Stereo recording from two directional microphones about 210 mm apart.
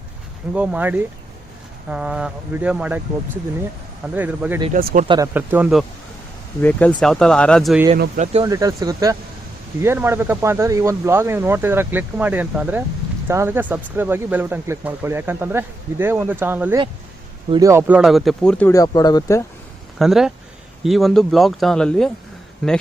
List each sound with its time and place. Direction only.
0.5 s speech: 5° right (ahead or behind)
4.0 s speech: 5° right (ahead or behind)
4.7 s speech: 40° right (ahead or behind)
5.0 s speech: 20° right (ahead or behind)
5.3 s speech: 10° right (ahead or behind)
6.6 s speech: 10° left (ahead or behind)
7.9 s speech: 50° right (ahead or behind)
8.2 s speech: 30° right (ahead or behind)
8.4 s speech: 15° right (ahead or behind); by 18.7 s 5° left (ahead or behind)
18.7 s speech: 15° left (ahead or behind)
20.0 s speech: centre (ahead or behind)